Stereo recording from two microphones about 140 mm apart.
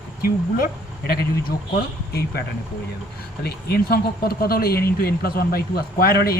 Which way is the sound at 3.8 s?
90° left.